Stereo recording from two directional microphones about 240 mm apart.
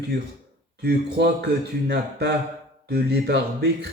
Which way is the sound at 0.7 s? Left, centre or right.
Right.